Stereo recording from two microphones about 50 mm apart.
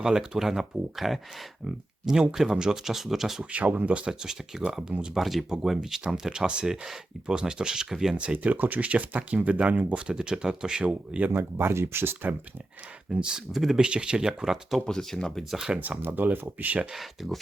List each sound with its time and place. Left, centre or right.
0.0 s speech: centre
2.3 s speech: centre
3.5 s speech: right
3.9 s speech: centre
4.8 s speech: right
5.1 s speech: centre
8.1 s speech: right
8.5 s speech: right; by 11.2 s centre
11.5 s speech: right
13.1 s speech: centre
14.8 s speech: centre
15.4 s speech: centre
15.8 s speech: right
16.9 s speech: centre